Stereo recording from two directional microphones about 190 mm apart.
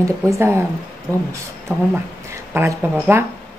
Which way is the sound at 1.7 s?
10° right (ahead or behind).